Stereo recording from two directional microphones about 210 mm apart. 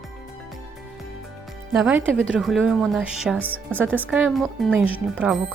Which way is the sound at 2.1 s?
Centre (ahead or behind).